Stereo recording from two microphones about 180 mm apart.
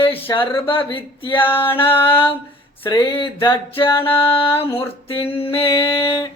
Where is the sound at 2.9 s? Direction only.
30° left (ahead or behind).